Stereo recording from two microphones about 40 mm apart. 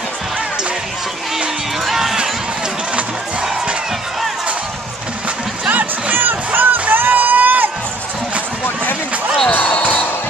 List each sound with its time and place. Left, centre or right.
1.9 s run: centre
5.7 s music: right
6.1 s crowd: right
9.5 s basketball bounce: left